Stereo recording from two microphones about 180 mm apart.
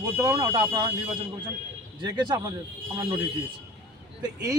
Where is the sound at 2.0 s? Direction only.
20° right (ahead or behind).